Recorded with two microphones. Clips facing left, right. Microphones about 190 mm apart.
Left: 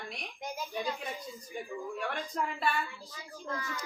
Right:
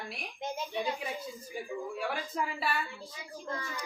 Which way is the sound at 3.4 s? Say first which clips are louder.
Left 1 dB; 25° right (ahead or behind).